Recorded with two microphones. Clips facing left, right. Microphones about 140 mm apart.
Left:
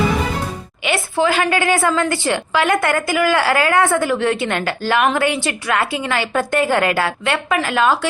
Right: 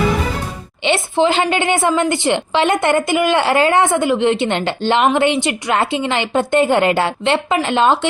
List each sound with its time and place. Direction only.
0.9 s a woman's voice: 25° right (ahead or behind)